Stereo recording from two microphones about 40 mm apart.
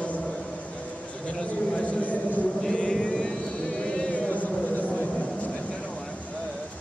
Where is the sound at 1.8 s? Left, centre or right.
Left.